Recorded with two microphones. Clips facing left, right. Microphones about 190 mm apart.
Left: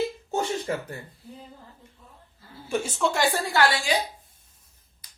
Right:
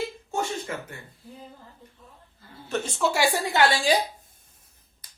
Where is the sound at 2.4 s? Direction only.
10° left (ahead or behind).